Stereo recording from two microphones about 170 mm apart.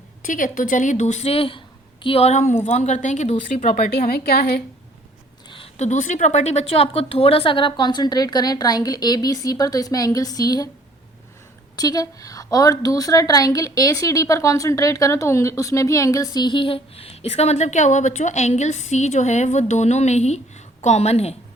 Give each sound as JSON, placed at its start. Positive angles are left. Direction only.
{"t": 0.3, "sound": "a woman's voice", "side_deg": 50}
{"t": 5.5, "sound": "a woman's voice", "side_deg": 35}
{"t": 11.8, "sound": "a woman's voice", "side_deg": 20}